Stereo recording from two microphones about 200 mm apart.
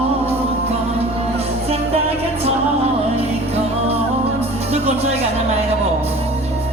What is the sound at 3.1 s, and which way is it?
Music, 30° right (ahead or behind).